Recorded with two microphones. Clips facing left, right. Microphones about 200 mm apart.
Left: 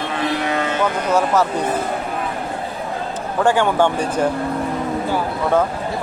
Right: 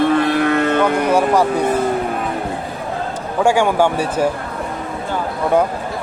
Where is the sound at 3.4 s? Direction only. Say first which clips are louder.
Right 2 dB; 10° right (ahead or behind).